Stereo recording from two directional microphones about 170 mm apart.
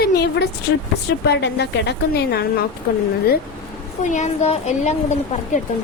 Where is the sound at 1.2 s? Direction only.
80° left.